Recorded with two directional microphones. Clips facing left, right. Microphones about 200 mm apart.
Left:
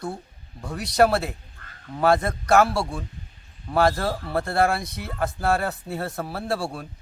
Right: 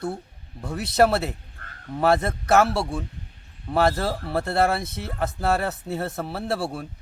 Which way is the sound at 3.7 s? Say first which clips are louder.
Even; 5° right (ahead or behind).